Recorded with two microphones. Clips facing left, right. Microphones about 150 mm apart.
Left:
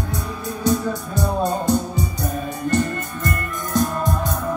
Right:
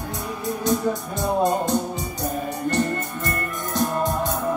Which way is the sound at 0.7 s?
20° right (ahead or behind).